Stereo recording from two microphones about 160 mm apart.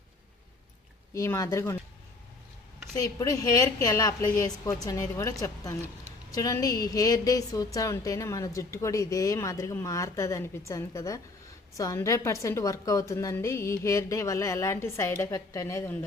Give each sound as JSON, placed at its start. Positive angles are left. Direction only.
{"t": 1.1, "sound": "speech", "side_deg": 20}
{"t": 2.9, "sound": "a woman's voice", "side_deg": 25}